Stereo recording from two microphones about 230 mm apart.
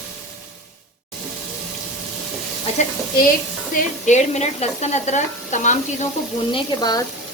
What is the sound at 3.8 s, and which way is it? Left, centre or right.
Speech, left.